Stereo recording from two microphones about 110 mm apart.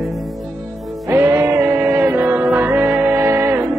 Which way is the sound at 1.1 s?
20° right (ahead or behind).